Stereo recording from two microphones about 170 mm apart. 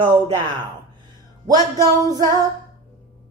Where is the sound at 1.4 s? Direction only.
25° right (ahead or behind).